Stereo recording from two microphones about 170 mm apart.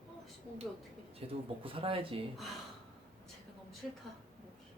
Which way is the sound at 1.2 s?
35° right (ahead or behind).